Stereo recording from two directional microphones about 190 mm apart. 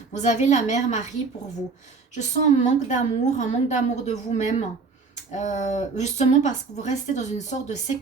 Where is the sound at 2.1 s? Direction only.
40° left (ahead or behind).